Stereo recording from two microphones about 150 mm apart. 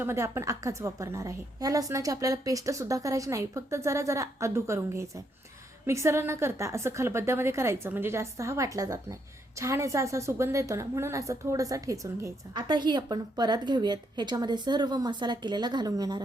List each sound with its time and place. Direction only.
0.0 s a woman's voice: 15° right (ahead or behind)